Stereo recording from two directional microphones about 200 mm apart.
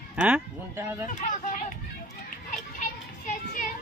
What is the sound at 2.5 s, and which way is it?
Children playing, 40° left (ahead or behind).